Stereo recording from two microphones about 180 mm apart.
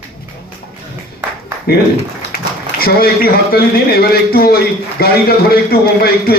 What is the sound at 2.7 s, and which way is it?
Speech, 55° left (ahead or behind).